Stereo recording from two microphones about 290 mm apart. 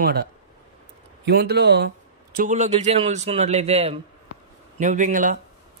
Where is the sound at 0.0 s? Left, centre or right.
Right.